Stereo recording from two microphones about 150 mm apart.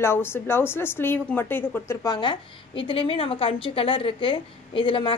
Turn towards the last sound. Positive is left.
turn(degrees=35)  # may be behind; listen again after turning